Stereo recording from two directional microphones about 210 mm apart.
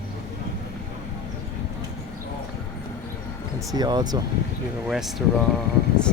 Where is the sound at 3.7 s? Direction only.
20° right (ahead or behind).